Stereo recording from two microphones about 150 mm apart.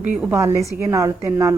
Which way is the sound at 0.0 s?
10° right (ahead or behind).